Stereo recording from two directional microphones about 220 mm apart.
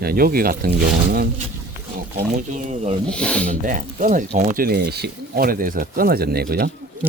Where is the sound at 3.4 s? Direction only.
35° right (ahead or behind).